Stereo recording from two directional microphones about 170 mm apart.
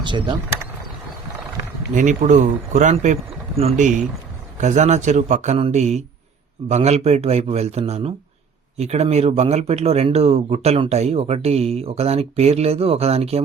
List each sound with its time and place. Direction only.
0.0 s speech: 25° right (ahead or behind)
2.0 s speech: 45° right (ahead or behind)